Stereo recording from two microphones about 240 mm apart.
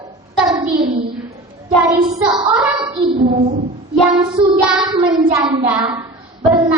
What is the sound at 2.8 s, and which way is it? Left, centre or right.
Child singing, right.